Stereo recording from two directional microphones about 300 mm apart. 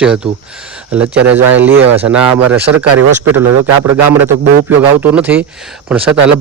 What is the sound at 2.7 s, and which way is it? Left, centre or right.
Speech, right.